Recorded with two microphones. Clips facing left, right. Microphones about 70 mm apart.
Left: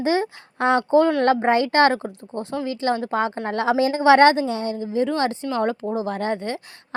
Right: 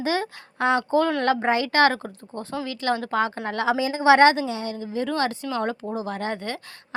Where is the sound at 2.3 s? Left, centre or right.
Left.